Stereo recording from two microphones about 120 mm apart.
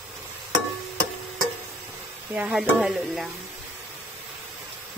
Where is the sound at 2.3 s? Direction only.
5° right (ahead or behind).